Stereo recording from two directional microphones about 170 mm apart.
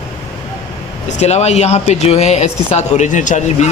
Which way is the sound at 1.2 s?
40° left (ahead or behind).